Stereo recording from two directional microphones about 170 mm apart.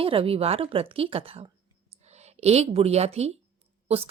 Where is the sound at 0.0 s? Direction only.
35° right (ahead or behind).